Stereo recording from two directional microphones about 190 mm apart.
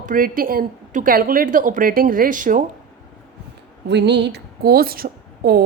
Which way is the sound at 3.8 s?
65° right (ahead or behind).